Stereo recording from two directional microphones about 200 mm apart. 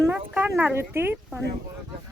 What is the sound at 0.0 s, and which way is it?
Speech, 10° right (ahead or behind).